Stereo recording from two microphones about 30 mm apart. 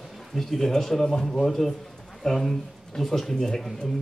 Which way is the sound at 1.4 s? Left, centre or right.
Centre.